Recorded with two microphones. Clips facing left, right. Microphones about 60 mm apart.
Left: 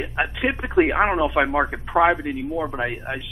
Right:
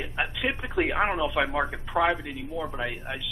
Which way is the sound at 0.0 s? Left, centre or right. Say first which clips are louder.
Left 5 dB; left.